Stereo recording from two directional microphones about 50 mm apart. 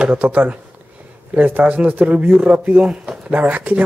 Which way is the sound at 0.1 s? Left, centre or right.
Right.